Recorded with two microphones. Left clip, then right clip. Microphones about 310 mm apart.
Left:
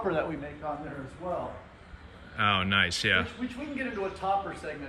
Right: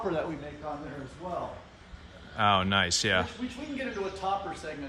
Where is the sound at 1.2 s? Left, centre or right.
Centre.